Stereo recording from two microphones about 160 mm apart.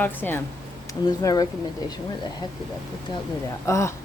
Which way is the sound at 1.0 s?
25° left (ahead or behind).